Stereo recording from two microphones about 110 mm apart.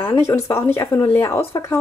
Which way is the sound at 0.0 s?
25° left (ahead or behind).